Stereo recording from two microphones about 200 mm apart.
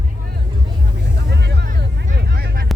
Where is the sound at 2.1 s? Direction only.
50° right (ahead or behind).